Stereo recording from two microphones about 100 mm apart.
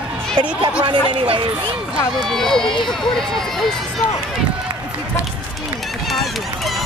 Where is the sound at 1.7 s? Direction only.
10° right (ahead or behind).